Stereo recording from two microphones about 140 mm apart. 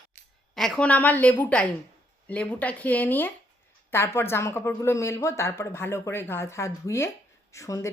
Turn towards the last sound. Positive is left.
turn(degrees=20)  # may be behind; listen again after turning